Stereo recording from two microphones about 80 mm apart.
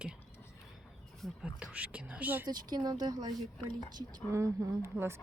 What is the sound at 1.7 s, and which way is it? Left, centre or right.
Speech, centre.